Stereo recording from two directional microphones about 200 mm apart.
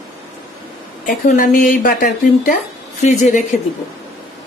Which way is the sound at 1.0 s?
40° left (ahead or behind).